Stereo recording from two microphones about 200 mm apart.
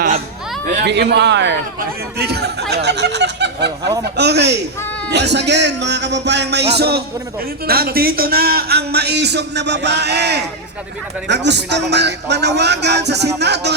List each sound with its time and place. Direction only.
0.9 s speech: 60° right (ahead or behind)